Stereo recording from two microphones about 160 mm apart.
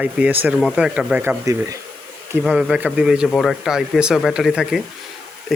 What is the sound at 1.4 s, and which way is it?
Speech, 20° right (ahead or behind).